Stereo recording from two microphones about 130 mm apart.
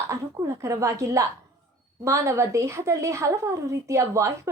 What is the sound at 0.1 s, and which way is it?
A woman's voice, 25° right (ahead or behind).